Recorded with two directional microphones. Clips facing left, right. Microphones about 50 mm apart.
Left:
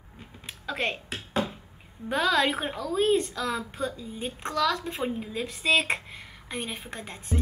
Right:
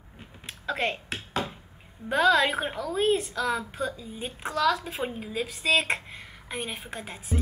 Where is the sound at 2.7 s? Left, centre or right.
Right.